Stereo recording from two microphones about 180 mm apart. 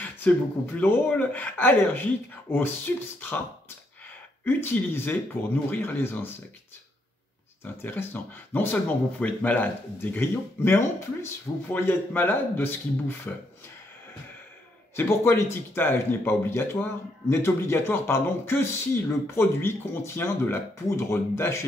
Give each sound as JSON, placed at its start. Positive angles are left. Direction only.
{"t": 0.3, "sound": "speech", "side_deg": 10}
{"t": 4.5, "sound": "speech", "side_deg": 10}
{"t": 7.6, "sound": "speech", "side_deg": 10}
{"t": 15.0, "sound": "speech", "side_deg": 15}